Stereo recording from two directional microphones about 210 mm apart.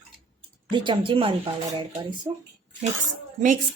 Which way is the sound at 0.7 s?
20° right (ahead or behind).